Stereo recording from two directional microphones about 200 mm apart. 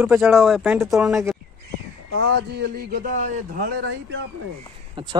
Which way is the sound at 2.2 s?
55° right (ahead or behind).